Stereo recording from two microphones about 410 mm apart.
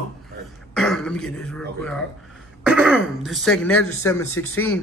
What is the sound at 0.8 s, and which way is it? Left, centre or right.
Speech, centre.